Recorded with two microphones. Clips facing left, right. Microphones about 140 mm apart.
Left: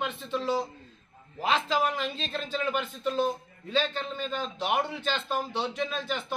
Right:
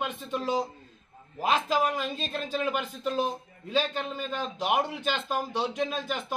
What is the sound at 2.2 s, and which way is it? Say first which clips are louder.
Speech: right 1 dB; 45° right (ahead or behind).